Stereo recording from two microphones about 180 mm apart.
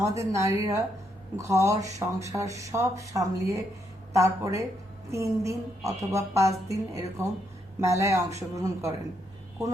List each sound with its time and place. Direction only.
0.0 s speech: 15° right (ahead or behind)